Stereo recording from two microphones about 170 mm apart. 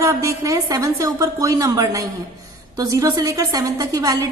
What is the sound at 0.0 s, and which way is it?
A woman's voice, 15° right (ahead or behind).